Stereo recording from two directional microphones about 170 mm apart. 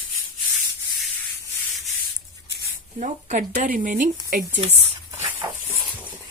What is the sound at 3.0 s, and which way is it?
Speech, 45° right (ahead or behind).